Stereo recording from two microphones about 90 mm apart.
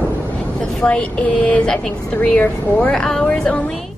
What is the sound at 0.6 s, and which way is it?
Speech, 10° left (ahead or behind).